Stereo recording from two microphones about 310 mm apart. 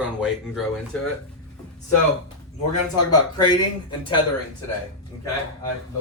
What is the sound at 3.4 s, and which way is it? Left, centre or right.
Speech, centre.